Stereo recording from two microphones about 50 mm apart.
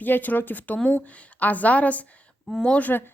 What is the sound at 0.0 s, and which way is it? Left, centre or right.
A woman's voice, left.